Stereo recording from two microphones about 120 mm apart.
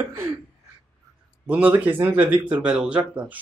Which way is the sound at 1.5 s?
15° right (ahead or behind).